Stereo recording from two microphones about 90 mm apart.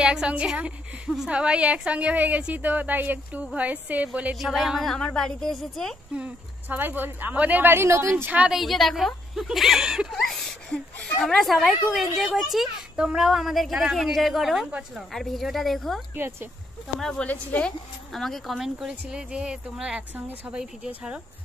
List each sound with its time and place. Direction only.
0.0 s a woman's voice: 10° right (ahead or behind)
4.4 s speech: centre (ahead or behind)
6.1 s a woman's voice: 15° right (ahead or behind); by 8.3 s 30° right (ahead or behind)
8.5 s a woman's voice: centre (ahead or behind)
15.1 s speech: centre (ahead or behind)
17.0 s speech: 10° left (ahead or behind)
18.1 s a woman's voice: centre (ahead or behind)